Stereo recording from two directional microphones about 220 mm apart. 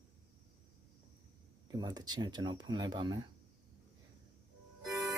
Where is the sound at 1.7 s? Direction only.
20° right (ahead or behind).